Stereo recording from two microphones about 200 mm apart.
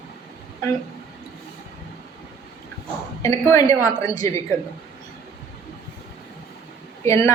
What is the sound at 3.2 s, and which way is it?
A woman's voice, 15° left (ahead or behind).